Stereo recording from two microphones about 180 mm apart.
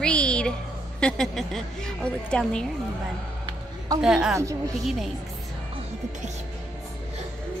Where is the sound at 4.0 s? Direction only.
5° right (ahead or behind).